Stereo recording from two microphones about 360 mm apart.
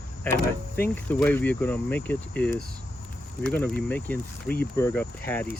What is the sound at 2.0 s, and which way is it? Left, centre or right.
Speech, left.